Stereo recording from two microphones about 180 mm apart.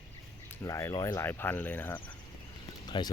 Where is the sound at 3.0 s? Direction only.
25° left (ahead or behind).